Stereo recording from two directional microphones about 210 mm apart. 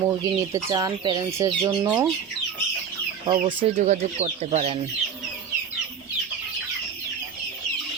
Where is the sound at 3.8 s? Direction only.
35° right (ahead or behind).